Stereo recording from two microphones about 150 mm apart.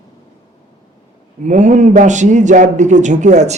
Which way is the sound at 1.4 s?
55° right (ahead or behind).